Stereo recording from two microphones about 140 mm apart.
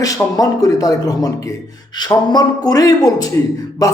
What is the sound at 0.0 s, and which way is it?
Speech, 25° left (ahead or behind).